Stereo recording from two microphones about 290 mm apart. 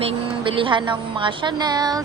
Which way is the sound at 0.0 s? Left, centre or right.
Centre.